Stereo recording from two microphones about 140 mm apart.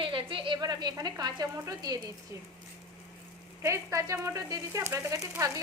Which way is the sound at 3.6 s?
20° right (ahead or behind).